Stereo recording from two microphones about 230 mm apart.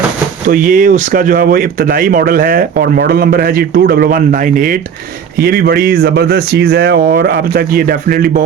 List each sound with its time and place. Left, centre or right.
0.4 s speech: right